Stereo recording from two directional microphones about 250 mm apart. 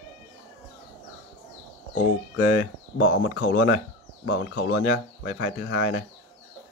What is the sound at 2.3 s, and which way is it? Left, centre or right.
Speech, left.